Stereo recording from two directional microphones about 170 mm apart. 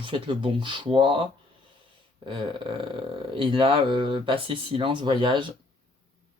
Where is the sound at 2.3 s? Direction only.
30° right (ahead or behind).